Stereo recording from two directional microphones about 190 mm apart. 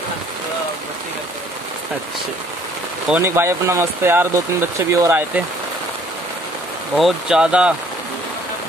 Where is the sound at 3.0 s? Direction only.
10° right (ahead or behind).